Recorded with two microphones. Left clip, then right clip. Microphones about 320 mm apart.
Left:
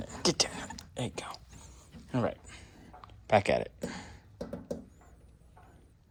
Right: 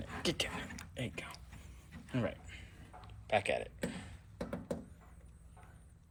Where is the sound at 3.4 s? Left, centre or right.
Left.